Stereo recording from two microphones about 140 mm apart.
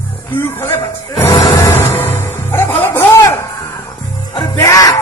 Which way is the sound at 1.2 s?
25° left (ahead or behind).